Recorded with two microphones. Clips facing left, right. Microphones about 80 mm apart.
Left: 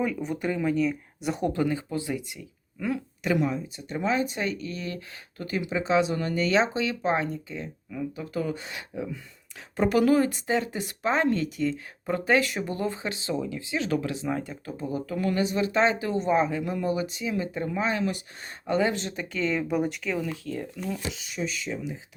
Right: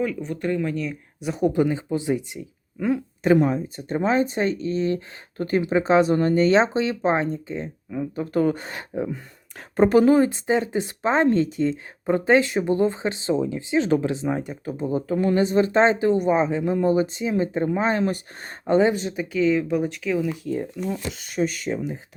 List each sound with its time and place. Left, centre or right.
0.0 s speech: centre
1.5 s speech: centre
3.2 s speech: right
10.0 s speech: right
18.6 s speech: right
19.0 s speech: centre
20.4 s speech: centre
20.9 s speech: right